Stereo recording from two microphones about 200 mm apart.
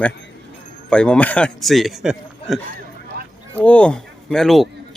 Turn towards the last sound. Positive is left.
turn(degrees=0)  # may be behind; listen again after turning